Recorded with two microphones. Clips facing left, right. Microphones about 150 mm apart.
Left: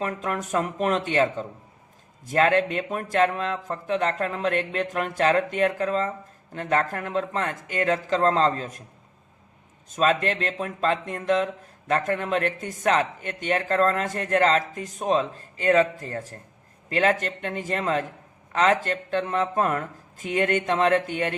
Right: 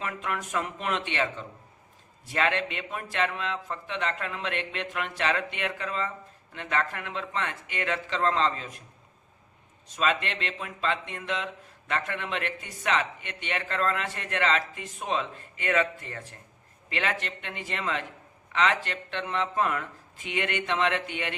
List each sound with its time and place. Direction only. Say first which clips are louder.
0.0 s speech: left 5 dB; 40° left (ahead or behind)
9.9 s speech: left 6 dB; 40° left (ahead or behind)